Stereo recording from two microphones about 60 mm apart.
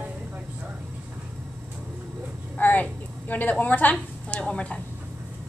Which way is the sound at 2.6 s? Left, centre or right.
Left.